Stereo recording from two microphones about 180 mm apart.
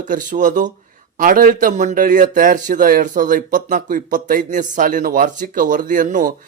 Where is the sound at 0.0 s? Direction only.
45° right (ahead or behind).